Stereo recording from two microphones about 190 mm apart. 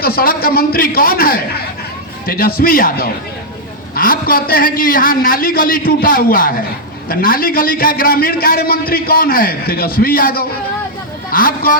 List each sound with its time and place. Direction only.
0.0 s a man's voice: 50° left (ahead or behind)